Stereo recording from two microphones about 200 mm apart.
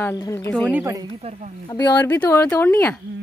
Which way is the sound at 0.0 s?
15° left (ahead or behind).